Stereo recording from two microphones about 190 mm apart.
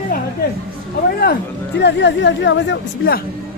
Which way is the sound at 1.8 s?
65° left (ahead or behind).